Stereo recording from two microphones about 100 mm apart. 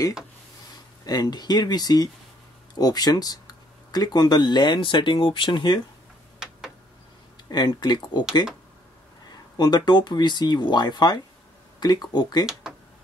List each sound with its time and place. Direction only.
1.0 s speech: 40° left (ahead or behind)
7.4 s speech: 45° left (ahead or behind)
9.6 s speech: 45° left (ahead or behind)